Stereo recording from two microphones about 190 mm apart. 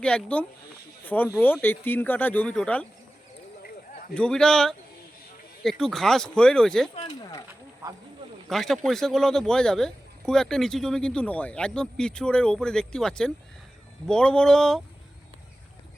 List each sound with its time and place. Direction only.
0.0 s speech: 5° left (ahead or behind)
4.1 s speech: 5° left (ahead or behind)
6.9 s speech: 20° left (ahead or behind)
8.4 s speech: centre (ahead or behind)